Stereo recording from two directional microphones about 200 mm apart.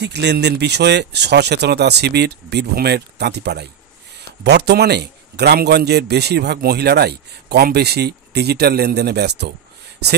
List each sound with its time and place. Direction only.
0.0 s a man's voice: 55° right (ahead or behind)